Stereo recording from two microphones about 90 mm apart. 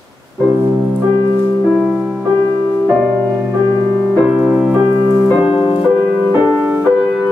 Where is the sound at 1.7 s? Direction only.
5° right (ahead or behind).